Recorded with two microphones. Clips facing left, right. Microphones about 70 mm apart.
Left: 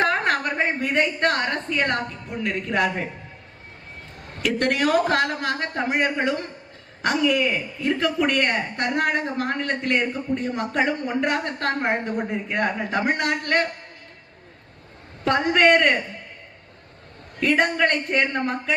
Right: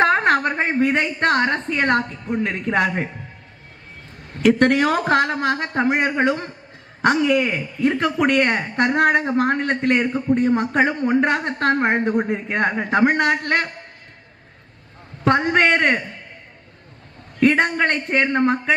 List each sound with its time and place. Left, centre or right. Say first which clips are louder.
0.0 s a woman's voice: right 5 dB; right
4.6 s speech: right 3 dB; right
15.2 s speech: right 2 dB; right
17.4 s speech: right 3 dB; right